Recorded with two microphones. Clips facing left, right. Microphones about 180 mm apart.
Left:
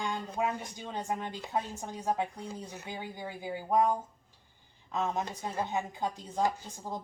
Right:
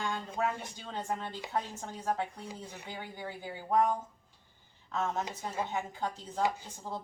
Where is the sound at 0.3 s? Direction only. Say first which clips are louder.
Left 1 dB; 15° left (ahead or behind).